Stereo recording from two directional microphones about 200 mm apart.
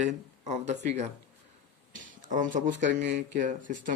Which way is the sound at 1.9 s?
40° right (ahead or behind).